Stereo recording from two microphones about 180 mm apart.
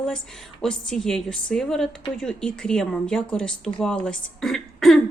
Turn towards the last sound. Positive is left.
turn(degrees=0)  # may be behind; listen again after turning